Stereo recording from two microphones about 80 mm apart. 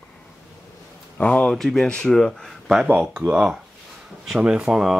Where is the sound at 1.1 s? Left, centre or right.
Centre.